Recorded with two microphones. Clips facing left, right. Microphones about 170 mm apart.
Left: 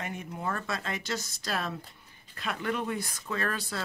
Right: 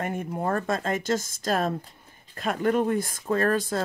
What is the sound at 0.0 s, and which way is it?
Speech, 50° right (ahead or behind).